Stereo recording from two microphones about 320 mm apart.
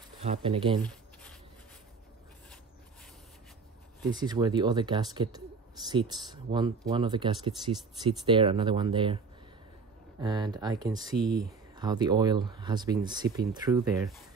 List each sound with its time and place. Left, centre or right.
0.2 s speech: centre
0.8 s writing: centre
4.0 s speech: centre
10.2 s speech: centre